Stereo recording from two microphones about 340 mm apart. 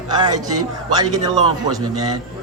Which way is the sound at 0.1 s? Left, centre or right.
Centre.